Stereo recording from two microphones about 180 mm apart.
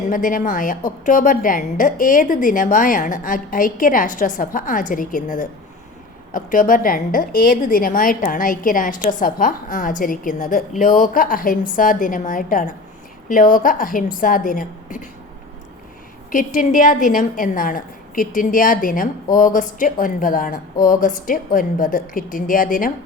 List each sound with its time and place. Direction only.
0.1 s a woman's voice: 50° left (ahead or behind)
16.3 s a woman's voice: 50° left (ahead or behind)